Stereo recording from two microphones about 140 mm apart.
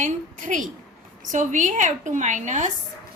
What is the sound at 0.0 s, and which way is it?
A woman's voice, 65° right (ahead or behind).